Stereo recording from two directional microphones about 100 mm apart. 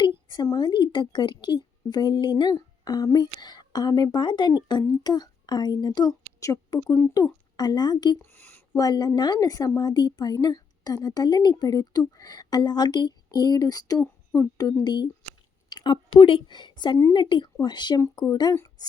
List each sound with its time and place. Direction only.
0.4 s a woman's voice: 45° left (ahead or behind)
6.8 s speech: 25° left (ahead or behind)
7.5 s speech: 45° left (ahead or behind)
8.2 s a sound: 20° left (ahead or behind)
8.7 s a woman's voice: 40° left (ahead or behind)
14.3 s speech: 20° left (ahead or behind)
14.8 s a woman's voice: 45° left (ahead or behind)
18.5 s speech: 30° left (ahead or behind)